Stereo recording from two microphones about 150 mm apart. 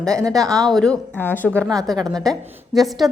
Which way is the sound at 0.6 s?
5° left (ahead or behind).